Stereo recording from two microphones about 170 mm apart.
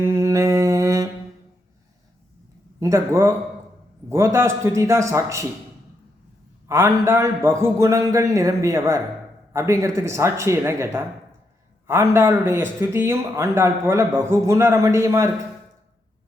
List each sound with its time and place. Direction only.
0.0 s mantra: 15° right (ahead or behind)
2.8 s speech: 15° right (ahead or behind)
6.7 s a man's voice: 15° right (ahead or behind)